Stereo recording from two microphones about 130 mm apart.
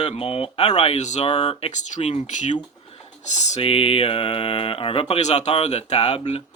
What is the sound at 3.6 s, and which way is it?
Speech, 50° left (ahead or behind).